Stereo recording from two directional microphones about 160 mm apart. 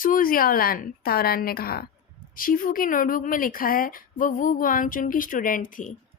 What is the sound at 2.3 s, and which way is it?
Speech, 60° left (ahead or behind).